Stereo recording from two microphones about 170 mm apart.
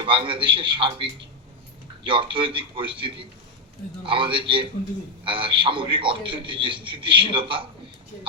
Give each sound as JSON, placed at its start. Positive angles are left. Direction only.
{"t": 0.0, "sound": "a man's voice", "side_deg": -30}